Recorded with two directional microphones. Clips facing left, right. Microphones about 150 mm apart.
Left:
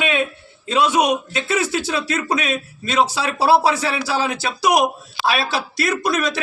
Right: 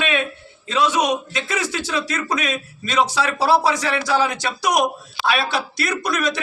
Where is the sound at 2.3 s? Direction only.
30° left (ahead or behind).